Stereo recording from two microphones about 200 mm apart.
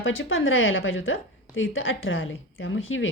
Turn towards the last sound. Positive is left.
turn(degrees=80)